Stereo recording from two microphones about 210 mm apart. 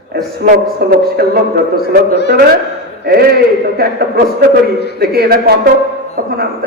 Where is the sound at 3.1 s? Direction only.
50° right (ahead or behind).